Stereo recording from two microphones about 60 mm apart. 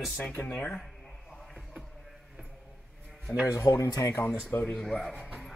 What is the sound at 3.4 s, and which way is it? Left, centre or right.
Speech, left.